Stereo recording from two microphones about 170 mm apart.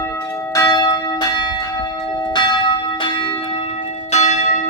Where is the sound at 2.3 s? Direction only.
25° left (ahead or behind).